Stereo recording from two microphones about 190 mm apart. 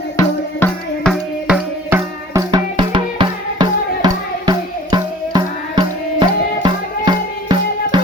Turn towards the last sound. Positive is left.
turn(degrees=-25)  # may be behind; listen again after turning